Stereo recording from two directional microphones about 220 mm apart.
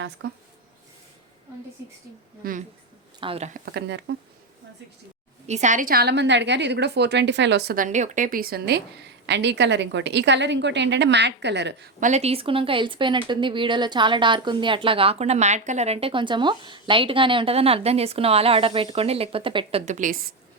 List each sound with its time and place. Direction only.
0.2 s a woman's voice: 55° right (ahead or behind)
2.4 s speech: 40° right (ahead or behind)
3.2 s speech: 25° right (ahead or behind)
3.7 s a woman's voice: 50° right (ahead or behind)
5.5 s a woman's voice: 35° right (ahead or behind); by 11.9 s 50° right (ahead or behind)
11.9 s speech: 35° right (ahead or behind)